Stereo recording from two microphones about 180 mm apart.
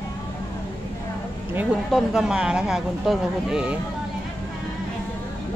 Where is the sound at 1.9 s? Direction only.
Centre (ahead or behind).